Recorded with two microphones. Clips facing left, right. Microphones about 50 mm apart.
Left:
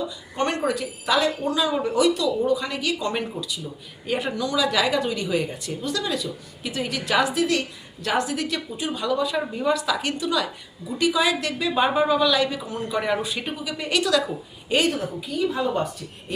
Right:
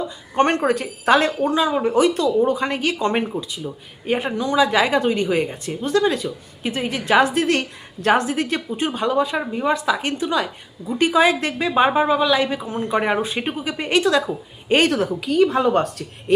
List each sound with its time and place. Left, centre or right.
0.3 s a woman's voice: right
7.3 s a woman's voice: right
14.8 s a woman's voice: right